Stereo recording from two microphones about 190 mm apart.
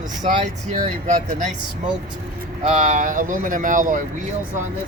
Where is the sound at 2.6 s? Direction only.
40° right (ahead or behind).